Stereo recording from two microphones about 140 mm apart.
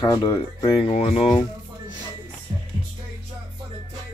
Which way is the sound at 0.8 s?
45° left (ahead or behind).